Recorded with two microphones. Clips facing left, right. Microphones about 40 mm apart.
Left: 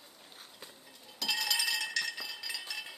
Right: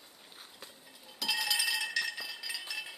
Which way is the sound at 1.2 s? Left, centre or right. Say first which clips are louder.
Right 1 dB; centre.